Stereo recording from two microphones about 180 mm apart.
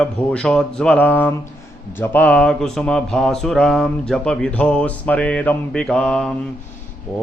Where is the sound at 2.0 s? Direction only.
10° left (ahead or behind).